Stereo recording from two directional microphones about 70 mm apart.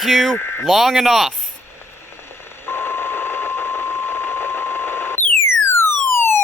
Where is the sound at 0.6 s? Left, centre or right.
Centre.